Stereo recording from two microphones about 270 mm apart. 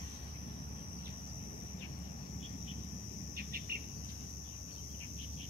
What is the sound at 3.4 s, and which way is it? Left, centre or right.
Cricket, right.